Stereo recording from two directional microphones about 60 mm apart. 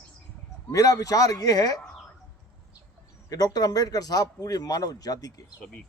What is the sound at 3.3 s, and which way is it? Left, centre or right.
Speech, left.